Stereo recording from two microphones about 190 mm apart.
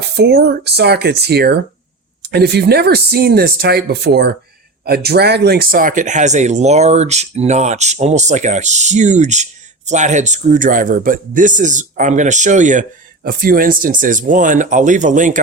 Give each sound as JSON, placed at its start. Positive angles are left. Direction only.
{"t": 0.2, "sound": "speech", "side_deg": -60}